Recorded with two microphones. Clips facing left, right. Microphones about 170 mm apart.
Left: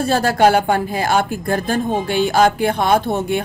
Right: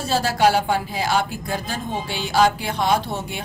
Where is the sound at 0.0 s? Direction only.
55° left (ahead or behind).